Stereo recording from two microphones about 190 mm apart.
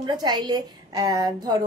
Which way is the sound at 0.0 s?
20° right (ahead or behind).